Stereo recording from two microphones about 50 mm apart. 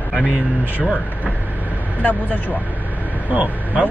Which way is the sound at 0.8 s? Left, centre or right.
Left.